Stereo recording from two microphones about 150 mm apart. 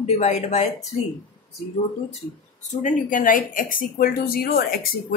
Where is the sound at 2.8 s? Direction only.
65° left (ahead or behind); by 4.9 s 80° left.